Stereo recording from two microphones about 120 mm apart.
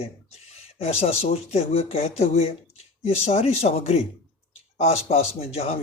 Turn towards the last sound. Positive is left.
turn(degrees=55)  # may be behind; listen again after turning